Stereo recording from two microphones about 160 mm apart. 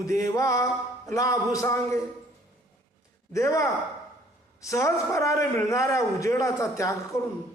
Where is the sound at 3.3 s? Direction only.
20° left (ahead or behind).